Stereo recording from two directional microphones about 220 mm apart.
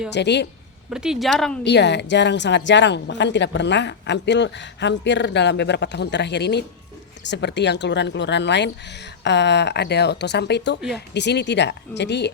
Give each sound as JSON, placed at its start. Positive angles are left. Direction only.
{"t": 0.1, "sound": "speech", "side_deg": 50}
{"t": 0.9, "sound": "speech", "side_deg": -5}
{"t": 1.6, "sound": "speech", "side_deg": 50}
{"t": 10.8, "sound": "speech", "side_deg": 0}
{"t": 11.1, "sound": "speech", "side_deg": 50}